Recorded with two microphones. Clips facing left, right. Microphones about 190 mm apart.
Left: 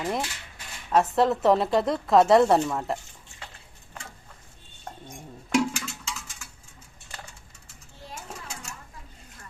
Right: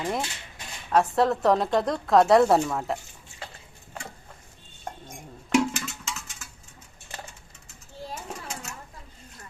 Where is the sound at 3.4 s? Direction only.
35° right (ahead or behind).